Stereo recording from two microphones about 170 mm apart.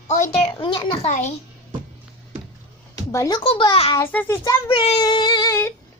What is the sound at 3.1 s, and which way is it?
Speech, 20° left (ahead or behind).